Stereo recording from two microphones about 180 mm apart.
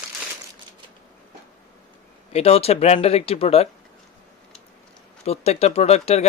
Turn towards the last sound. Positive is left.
turn(degrees=35)  # may be behind; listen again after turning